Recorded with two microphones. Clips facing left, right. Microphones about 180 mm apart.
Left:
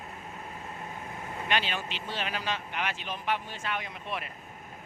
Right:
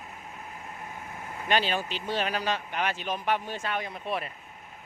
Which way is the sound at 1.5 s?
40° right (ahead or behind).